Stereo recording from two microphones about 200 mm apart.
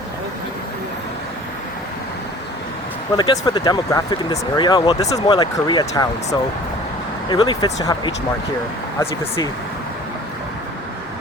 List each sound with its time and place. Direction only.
3.2 s speech: 20° left (ahead or behind)
7.3 s speech: 20° left (ahead or behind)